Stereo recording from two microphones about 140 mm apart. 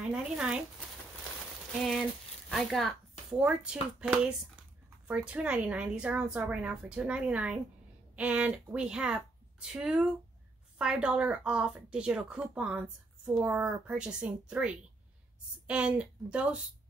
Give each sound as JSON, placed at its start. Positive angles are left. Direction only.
{"t": 0.1, "sound": "speech", "side_deg": -5}
{"t": 2.5, "sound": "a woman's voice", "side_deg": 0}